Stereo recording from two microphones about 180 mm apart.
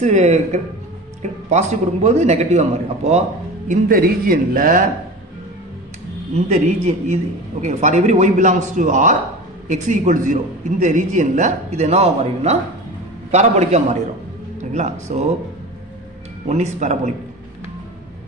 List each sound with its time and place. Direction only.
0.0 s a man's voice: 40° right (ahead or behind)
6.3 s a man's voice: 40° right (ahead or behind)
16.4 s a man's voice: 40° right (ahead or behind)